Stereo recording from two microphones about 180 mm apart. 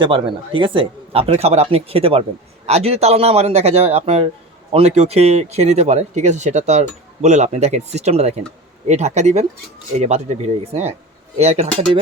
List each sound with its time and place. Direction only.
0.0 s speech: 30° right (ahead or behind)